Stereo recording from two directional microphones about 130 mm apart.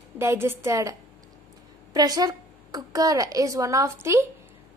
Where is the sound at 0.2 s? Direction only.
20° right (ahead or behind).